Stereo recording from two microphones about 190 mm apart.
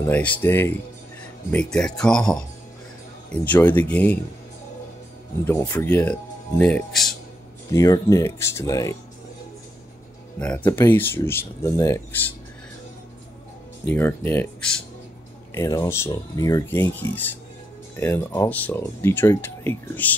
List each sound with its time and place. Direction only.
0.0 s speech: 10° left (ahead or behind)
5.4 s speech: 10° left (ahead or behind)
7.7 s speech: 15° left (ahead or behind)
10.4 s speech: 5° left (ahead or behind)
13.8 s speech: 10° left (ahead or behind)